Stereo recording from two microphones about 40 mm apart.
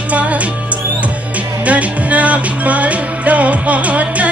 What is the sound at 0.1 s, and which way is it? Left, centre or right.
Music, right.